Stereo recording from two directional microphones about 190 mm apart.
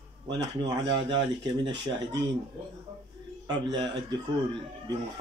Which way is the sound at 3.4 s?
25° right (ahead or behind).